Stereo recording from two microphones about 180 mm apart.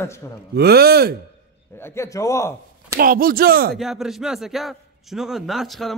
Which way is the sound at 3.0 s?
55° right (ahead or behind).